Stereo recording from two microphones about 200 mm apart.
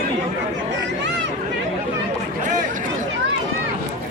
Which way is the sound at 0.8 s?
60° right (ahead or behind).